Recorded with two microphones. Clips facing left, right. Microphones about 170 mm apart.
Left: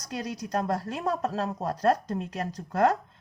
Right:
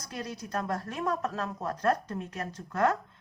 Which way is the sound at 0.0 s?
40° left (ahead or behind).